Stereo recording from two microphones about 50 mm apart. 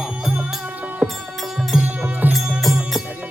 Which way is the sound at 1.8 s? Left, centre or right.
Right.